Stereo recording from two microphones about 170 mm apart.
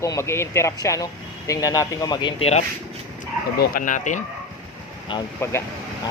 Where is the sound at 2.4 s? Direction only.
40° left (ahead or behind).